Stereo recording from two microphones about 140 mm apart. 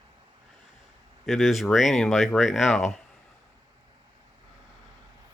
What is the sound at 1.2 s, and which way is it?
Speech, centre (ahead or behind).